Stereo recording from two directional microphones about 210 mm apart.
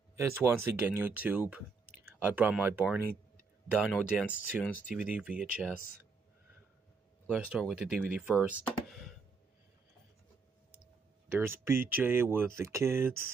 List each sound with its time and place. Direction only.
0.1 s speech: 15° right (ahead or behind)
7.2 s speech: centre (ahead or behind)
11.2 s speech: 10° right (ahead or behind)